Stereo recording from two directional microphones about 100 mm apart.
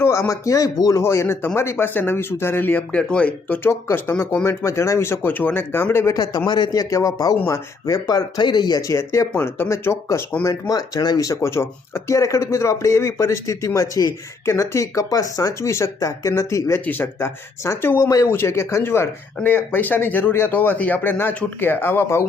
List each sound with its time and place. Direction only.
0.0 s speech: 30° left (ahead or behind)
6.1 s speech: 45° left (ahead or behind)
7.3 s speech: 25° left (ahead or behind)
7.9 s speech: 40° left (ahead or behind)
8.8 s speech: 30° left (ahead or behind)
10.4 s speech: 35° left (ahead or behind)
16.8 s speech: 20° left (ahead or behind)